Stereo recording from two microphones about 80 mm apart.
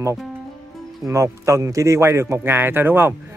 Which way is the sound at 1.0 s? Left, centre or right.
Right.